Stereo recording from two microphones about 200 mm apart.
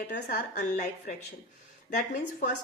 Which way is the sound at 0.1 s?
45° left (ahead or behind).